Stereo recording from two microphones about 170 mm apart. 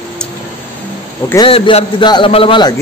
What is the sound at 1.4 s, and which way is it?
A man's voice, 30° left (ahead or behind).